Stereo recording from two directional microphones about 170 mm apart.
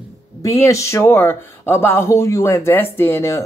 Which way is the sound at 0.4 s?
15° left (ahead or behind).